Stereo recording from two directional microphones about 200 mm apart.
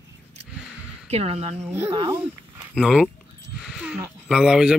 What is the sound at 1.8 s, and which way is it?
Speech, 25° right (ahead or behind).